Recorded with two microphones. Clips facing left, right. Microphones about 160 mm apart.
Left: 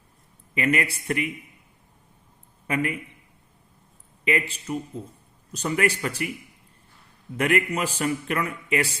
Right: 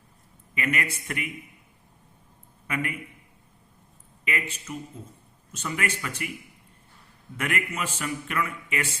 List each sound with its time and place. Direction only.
0.5 s a man's voice: 35° left (ahead or behind)
2.6 s a man's voice: 35° left (ahead or behind)
4.3 s a man's voice: 35° left (ahead or behind)
7.3 s a man's voice: 35° left (ahead or behind)